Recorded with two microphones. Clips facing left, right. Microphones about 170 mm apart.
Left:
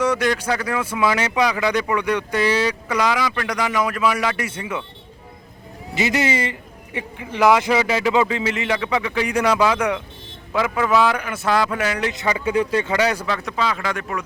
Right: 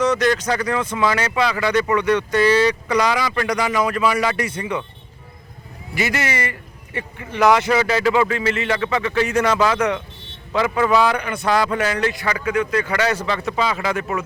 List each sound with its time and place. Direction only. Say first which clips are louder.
0.0 s speech: right 2 dB; 10° left (ahead or behind)
5.9 s a man's voice: left 2 dB; 20° left (ahead or behind); by 12.0 s 5° left (ahead or behind)
12.0 s speech: right 1 dB; 15° left (ahead or behind)
12.5 s speech: even; 30° left (ahead or behind)
12.9 s speech: left 1 dB; 15° left (ahead or behind)
13.2 s a man's voice: right 2 dB; centre (ahead or behind)